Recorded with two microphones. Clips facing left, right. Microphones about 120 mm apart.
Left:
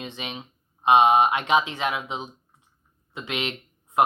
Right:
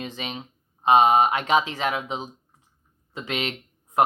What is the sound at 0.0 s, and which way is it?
Speech, 40° right (ahead or behind).